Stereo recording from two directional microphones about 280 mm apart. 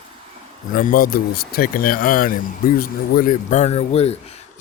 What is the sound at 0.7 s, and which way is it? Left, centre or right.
Speech, left.